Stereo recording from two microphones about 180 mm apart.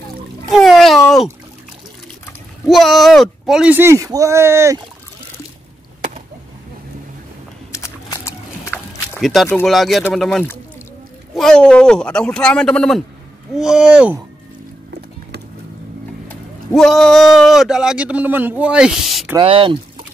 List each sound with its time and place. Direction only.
0.5 s a sound: centre (ahead or behind)
2.6 s speech: centre (ahead or behind)
7.7 s a sound: 15° left (ahead or behind)
9.2 s speech: centre (ahead or behind)
16.3 s speech: 5° left (ahead or behind)
19.3 s speech: 30° right (ahead or behind)